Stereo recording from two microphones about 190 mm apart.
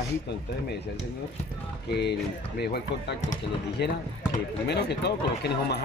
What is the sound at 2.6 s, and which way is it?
Speech, 60° left (ahead or behind).